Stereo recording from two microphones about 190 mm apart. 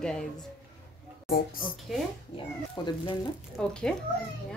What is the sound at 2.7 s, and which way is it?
Speech, 25° left (ahead or behind).